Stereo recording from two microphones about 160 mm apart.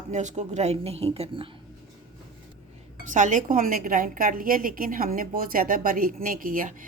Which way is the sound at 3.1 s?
50° right (ahead or behind).